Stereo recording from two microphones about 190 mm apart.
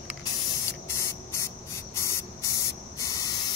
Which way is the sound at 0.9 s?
15° left (ahead or behind).